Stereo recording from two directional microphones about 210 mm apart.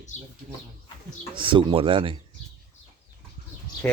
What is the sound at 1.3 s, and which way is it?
Speech, 25° right (ahead or behind).